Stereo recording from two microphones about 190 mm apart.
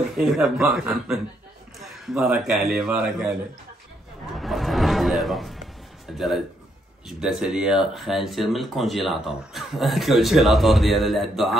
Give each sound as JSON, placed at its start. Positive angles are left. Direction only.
{"t": 0.2, "sound": "speech", "side_deg": 0}
{"t": 4.3, "sound": "a sound", "side_deg": 0}
{"t": 6.1, "sound": "speech", "side_deg": 0}